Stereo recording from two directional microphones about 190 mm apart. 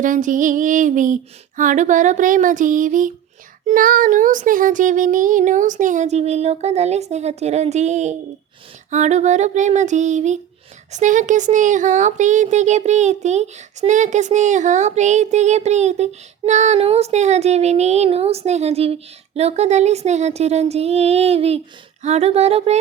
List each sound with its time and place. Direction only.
0.0 s female singing: 45° right (ahead or behind)
3.7 s speech: 45° right (ahead or behind)